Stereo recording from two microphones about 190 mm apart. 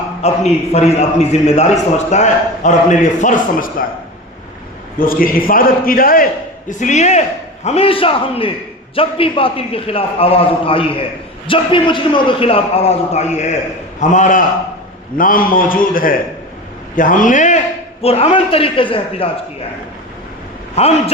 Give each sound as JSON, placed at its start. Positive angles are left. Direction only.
{"t": 0.2, "sound": "a man's voice", "side_deg": 35}
{"t": 4.9, "sound": "a man's voice", "side_deg": 50}
{"t": 20.8, "sound": "a man's voice", "side_deg": 35}